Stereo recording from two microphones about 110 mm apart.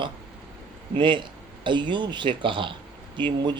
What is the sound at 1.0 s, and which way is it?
Speech, 50° right (ahead or behind).